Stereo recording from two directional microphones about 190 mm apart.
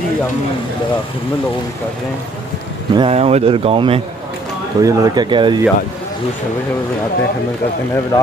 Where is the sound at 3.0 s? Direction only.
30° right (ahead or behind).